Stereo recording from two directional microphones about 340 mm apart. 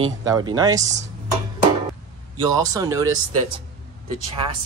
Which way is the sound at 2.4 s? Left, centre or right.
Centre.